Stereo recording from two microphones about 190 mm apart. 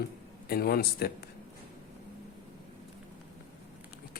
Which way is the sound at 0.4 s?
55° left (ahead or behind).